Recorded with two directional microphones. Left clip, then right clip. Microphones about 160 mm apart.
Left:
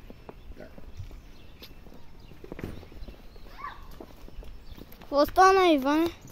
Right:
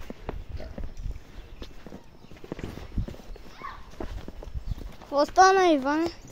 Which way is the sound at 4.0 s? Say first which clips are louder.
Right 11 dB; 55° right (ahead or behind).